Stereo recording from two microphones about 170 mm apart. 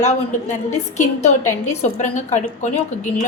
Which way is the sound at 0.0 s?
45° left (ahead or behind).